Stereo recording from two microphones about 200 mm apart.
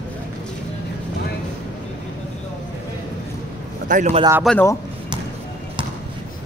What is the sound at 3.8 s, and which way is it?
Speech, 35° right (ahead or behind).